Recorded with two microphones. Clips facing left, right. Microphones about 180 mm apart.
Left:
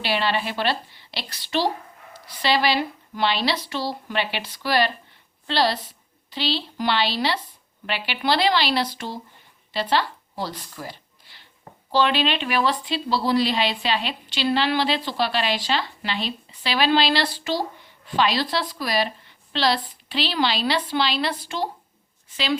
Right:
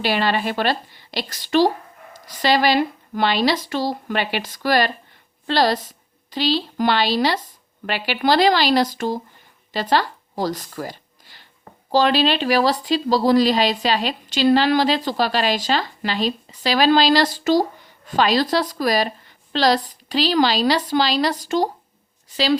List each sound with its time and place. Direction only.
0.0 s a woman's voice: 45° right (ahead or behind)